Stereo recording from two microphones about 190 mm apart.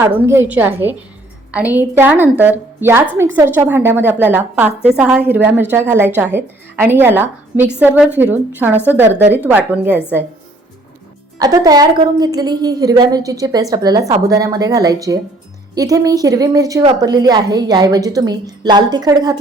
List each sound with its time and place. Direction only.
0.0 s a woman's voice: 10° right (ahead or behind)
11.3 s a woman's voice: 20° right (ahead or behind)